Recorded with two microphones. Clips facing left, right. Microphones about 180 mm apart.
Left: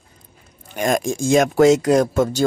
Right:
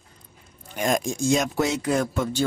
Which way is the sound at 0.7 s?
55° left (ahead or behind).